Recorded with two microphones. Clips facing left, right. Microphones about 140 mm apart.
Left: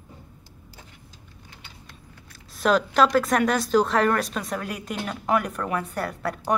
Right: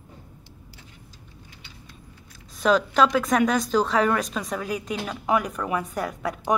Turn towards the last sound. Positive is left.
turn(degrees=0)  # may be behind; listen again after turning